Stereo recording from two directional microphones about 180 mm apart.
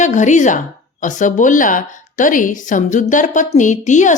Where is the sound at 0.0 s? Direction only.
40° left (ahead or behind).